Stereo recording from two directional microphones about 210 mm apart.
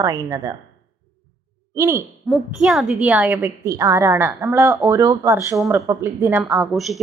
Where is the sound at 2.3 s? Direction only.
Centre (ahead or behind).